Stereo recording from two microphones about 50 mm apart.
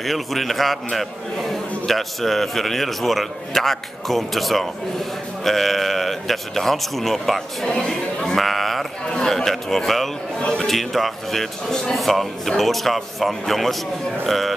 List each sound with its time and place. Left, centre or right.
0.0 s a man's voice: centre
8.4 s a sound: centre
9.2 s a man's voice: centre